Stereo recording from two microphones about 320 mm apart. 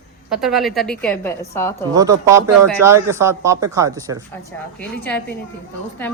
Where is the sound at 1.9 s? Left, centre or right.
Centre.